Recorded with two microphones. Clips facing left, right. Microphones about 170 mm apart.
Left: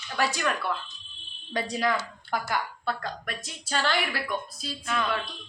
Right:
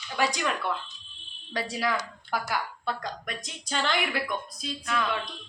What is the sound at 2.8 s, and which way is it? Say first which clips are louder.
Speech: left 1 dB; 20° right (ahead or behind).